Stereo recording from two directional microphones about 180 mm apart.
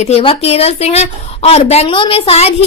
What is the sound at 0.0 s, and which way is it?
A woman's voice, 35° left (ahead or behind).